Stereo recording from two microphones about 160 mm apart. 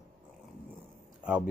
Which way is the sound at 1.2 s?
5° right (ahead or behind).